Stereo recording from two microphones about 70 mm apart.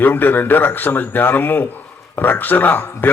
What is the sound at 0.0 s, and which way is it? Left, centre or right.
A man's voice, left.